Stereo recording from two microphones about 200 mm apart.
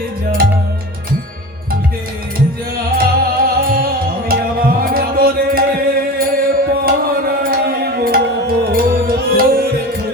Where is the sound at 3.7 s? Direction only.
45° right (ahead or behind).